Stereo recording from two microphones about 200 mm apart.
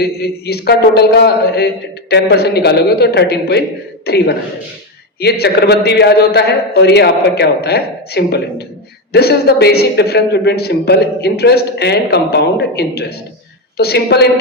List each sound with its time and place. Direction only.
0.0 s a man's voice: 55° left (ahead or behind)